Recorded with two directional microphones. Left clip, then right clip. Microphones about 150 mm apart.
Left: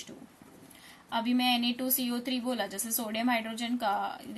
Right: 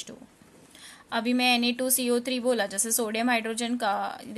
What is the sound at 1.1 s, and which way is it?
A woman's voice, 60° right (ahead or behind).